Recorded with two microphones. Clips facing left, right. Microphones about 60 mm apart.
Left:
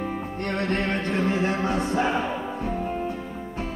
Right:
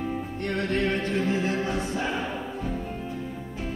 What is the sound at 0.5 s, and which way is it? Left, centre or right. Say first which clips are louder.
Music: even; left.